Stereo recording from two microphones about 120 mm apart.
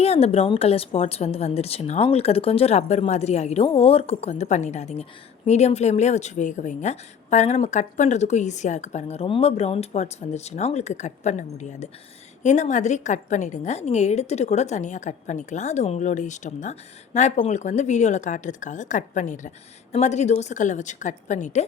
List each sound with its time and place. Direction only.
0.0 s a woman's voice: 55° left (ahead or behind)
3.7 s a woman's voice: 50° left (ahead or behind); by 9.2 s 70° left (ahead or behind)
9.2 s a woman's voice: 55° left (ahead or behind); by 19.5 s 90° left
19.9 s a woman's voice: 70° left (ahead or behind); by 21.6 s 90° left